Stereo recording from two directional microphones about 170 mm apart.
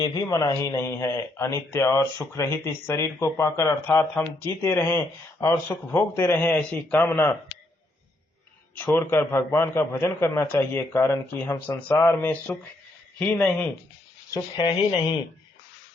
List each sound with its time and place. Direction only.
0.0 s speech: 20° left (ahead or behind)
8.8 s speech: 15° left (ahead or behind)
14.5 s speech: 30° left (ahead or behind)